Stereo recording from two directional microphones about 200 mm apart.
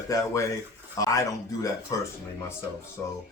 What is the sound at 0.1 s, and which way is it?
Speech, 15° left (ahead or behind).